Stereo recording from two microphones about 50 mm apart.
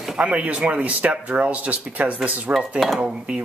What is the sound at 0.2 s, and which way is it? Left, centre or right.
Speech, right.